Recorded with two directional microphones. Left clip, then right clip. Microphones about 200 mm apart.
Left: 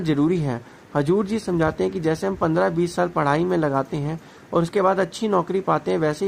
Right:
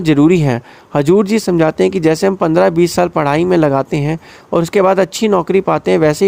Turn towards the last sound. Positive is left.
turn(degrees=-40)  # may be behind; listen again after turning